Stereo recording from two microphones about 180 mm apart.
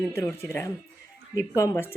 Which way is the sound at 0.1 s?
10° left (ahead or behind).